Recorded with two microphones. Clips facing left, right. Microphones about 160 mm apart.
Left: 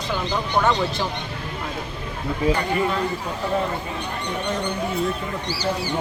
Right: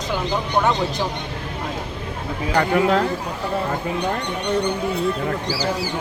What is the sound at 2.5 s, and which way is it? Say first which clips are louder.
Speech: right 5 dB; 90° right.